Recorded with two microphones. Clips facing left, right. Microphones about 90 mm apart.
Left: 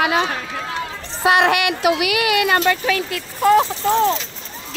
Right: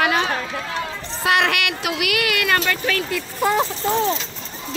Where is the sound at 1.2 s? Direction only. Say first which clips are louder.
Left 4 dB; 20° left (ahead or behind).